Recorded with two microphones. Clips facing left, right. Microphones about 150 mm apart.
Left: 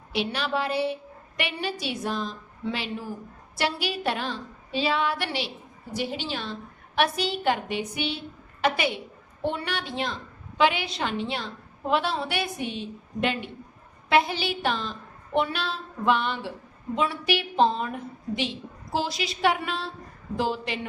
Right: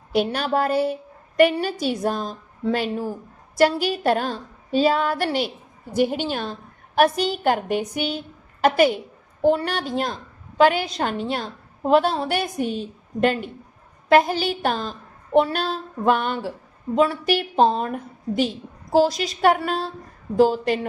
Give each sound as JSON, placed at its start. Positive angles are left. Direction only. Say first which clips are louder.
{"t": 0.1, "sound": "a woman's voice", "louder": "right 6 dB", "side_deg": -45}